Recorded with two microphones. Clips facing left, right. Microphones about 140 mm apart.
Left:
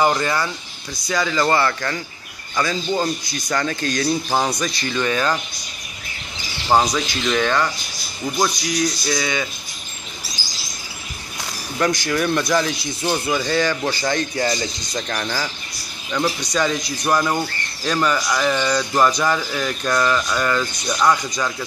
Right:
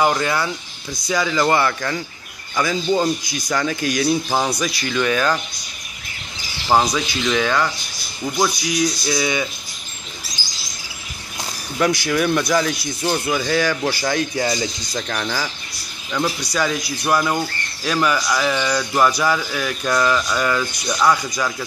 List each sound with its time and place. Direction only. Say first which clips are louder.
0.0 s speech: even; centre (ahead or behind)
4.8 s speech: right 2 dB; 5° left (ahead or behind)
6.7 s speech: even; 5° right (ahead or behind)
9.0 s speech: right 2 dB; 10° right (ahead or behind)
11.8 s speech: right 2 dB; 5° right (ahead or behind)